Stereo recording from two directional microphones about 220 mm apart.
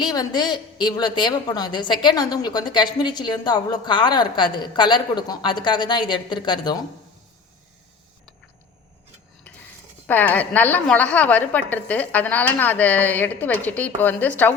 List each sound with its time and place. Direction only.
0.0 s a woman's voice: 20° left (ahead or behind)
10.1 s a woman's voice: 10° left (ahead or behind)